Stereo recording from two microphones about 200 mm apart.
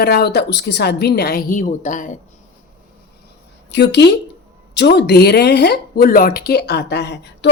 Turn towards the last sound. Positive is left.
turn(degrees=55)  # may be behind; listen again after turning